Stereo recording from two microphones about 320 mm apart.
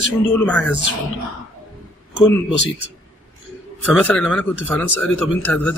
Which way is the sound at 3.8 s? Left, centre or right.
Centre.